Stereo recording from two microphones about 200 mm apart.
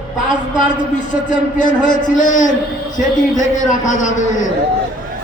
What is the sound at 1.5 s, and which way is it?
A man's voice, 40° left (ahead or behind).